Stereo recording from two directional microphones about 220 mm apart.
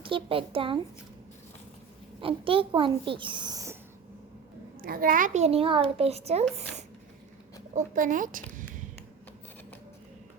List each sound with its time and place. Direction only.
0.0 s a child's voice: 25° right (ahead or behind)
2.2 s a child's voice: 25° right (ahead or behind)
4.8 s a child's voice: 40° right (ahead or behind)
7.8 s speech: 35° right (ahead or behind)